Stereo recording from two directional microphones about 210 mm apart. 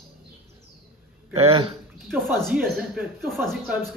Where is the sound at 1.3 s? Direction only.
30° right (ahead or behind).